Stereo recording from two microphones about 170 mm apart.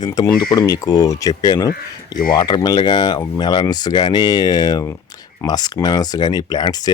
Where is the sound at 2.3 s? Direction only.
25° left (ahead or behind).